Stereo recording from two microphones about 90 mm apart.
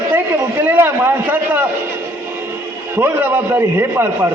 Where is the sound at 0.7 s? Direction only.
25° right (ahead or behind).